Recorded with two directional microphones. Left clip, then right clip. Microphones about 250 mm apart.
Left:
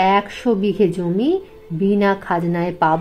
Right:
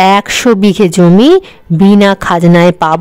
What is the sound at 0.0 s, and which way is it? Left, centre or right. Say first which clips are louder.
A woman's voice: right 9 dB; right.